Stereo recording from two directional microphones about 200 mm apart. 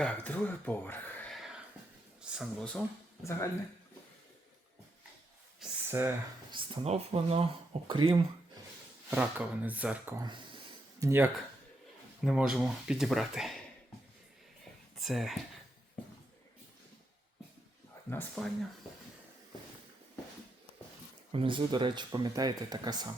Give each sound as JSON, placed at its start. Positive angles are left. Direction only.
{"t": 0.0, "sound": "speech", "side_deg": 10}
{"t": 5.5, "sound": "a sound", "side_deg": -10}
{"t": 6.5, "sound": "speech", "side_deg": -25}
{"t": 9.0, "sound": "speech", "side_deg": -5}
{"t": 10.2, "sound": "speech", "side_deg": -25}
{"t": 11.0, "sound": "speech", "side_deg": -10}
{"t": 14.9, "sound": "speech", "side_deg": 0}
{"t": 18.1, "sound": "speech", "side_deg": 5}
{"t": 21.3, "sound": "speech", "side_deg": -25}